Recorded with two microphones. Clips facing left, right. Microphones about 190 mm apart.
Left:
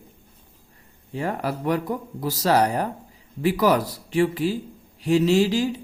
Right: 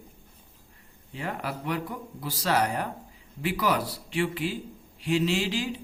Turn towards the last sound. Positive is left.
turn(degrees=40)  # may be behind; listen again after turning